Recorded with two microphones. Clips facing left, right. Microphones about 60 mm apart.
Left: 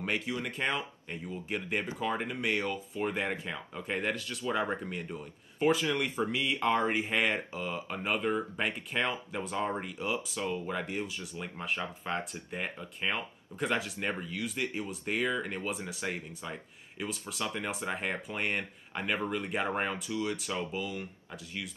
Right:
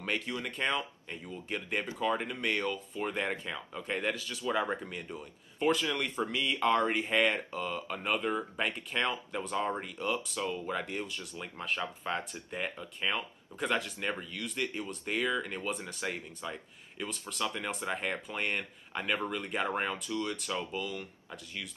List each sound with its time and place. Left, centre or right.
0.0 s speech: centre